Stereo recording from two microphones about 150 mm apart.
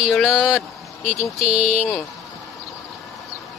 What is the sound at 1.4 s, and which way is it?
Speech, 45° right (ahead or behind).